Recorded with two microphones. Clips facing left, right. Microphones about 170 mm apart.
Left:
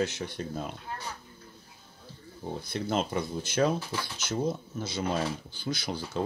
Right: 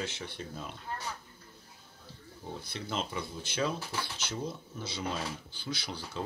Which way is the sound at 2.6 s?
45° left (ahead or behind).